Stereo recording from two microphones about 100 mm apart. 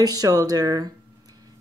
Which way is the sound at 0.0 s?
40° right (ahead or behind).